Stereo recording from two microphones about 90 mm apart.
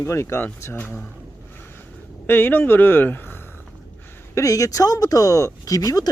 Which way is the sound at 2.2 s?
20° left (ahead or behind).